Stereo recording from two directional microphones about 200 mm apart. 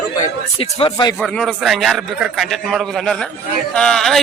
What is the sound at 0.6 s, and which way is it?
Speech, 25° left (ahead or behind).